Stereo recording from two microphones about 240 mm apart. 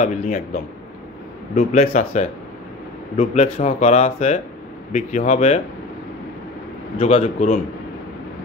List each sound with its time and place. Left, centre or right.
0.0 s speech: left
7.0 s speech: left